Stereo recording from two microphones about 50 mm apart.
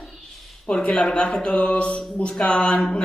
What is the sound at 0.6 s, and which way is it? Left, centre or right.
A man's voice, left.